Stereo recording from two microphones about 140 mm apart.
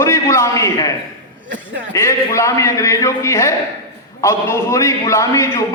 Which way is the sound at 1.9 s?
20° left (ahead or behind).